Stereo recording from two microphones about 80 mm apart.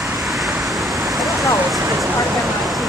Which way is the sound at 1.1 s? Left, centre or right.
Centre.